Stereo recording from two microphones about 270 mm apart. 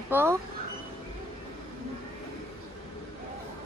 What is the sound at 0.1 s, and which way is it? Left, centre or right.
Speech, centre.